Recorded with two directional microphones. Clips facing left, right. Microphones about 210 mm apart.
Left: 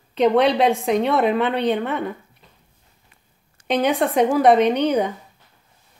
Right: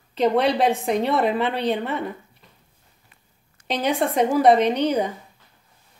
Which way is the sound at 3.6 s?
30° left (ahead or behind).